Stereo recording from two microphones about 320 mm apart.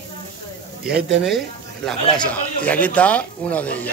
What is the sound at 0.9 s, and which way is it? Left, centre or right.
Speech, right.